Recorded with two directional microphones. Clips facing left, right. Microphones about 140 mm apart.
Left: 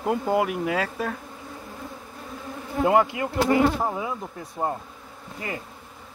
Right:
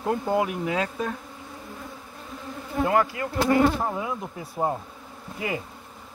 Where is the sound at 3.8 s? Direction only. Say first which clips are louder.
Left 1 dB; 5° left (ahead or behind).